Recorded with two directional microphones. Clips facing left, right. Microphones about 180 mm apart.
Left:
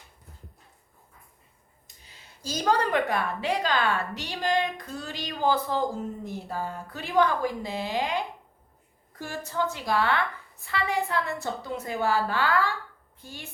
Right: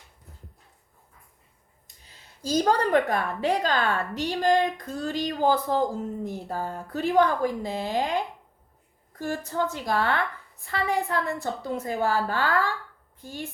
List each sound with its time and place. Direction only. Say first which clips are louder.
2.0 s a woman's voice: right 7 dB; 45° right (ahead or behind)
9.2 s a woman's voice: right 2 dB; 50° right (ahead or behind)